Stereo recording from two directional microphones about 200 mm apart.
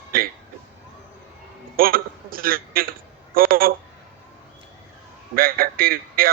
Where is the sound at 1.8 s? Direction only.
45° right (ahead or behind).